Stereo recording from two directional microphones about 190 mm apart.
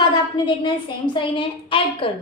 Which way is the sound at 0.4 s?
25° left (ahead or behind).